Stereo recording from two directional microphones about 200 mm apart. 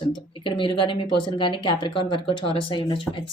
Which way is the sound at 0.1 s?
25° left (ahead or behind).